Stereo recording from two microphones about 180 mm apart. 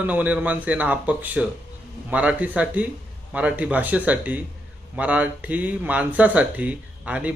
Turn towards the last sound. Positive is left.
turn(degrees=-5)  # may be behind; listen again after turning